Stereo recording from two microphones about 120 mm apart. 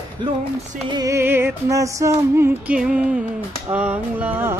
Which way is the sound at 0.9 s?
30° right (ahead or behind).